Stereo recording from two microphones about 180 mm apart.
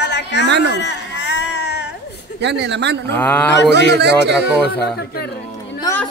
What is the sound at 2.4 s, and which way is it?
Speech, 70° right (ahead or behind).